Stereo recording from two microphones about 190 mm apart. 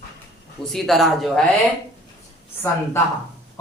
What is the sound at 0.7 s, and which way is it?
Speech, centre (ahead or behind).